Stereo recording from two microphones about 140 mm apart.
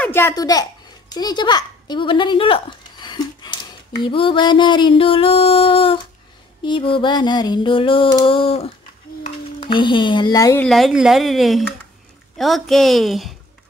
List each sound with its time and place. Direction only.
0.0 s a sound: 15° left (ahead or behind)
0.3 s a child's voice: 25° left (ahead or behind)
4.0 s music: 40° left (ahead or behind)
10.6 s speech: centre (ahead or behind)